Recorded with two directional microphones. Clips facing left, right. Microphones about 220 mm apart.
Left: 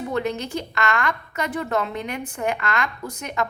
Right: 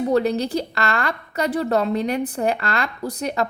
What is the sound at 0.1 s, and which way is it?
A woman's voice, 35° right (ahead or behind).